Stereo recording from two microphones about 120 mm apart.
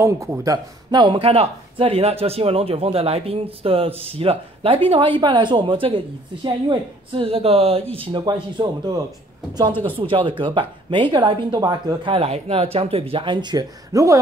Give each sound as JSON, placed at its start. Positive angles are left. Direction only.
{"t": 0.0, "sound": "speech", "side_deg": -25}
{"t": 0.9, "sound": "a woman's voice", "side_deg": -45}
{"t": 9.8, "sound": "speech", "side_deg": -50}